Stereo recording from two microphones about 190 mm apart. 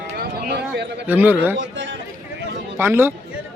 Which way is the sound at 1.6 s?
75° right (ahead or behind).